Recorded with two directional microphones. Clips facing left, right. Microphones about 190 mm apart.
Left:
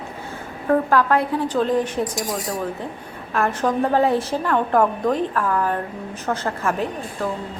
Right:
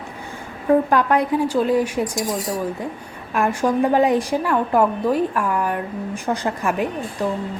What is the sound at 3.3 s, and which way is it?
A woman's voice, 15° right (ahead or behind).